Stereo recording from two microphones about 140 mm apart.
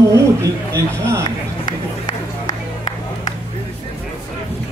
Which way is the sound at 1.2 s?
30° left (ahead or behind).